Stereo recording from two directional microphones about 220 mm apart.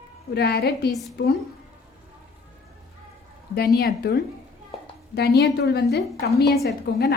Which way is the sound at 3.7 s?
45° left (ahead or behind).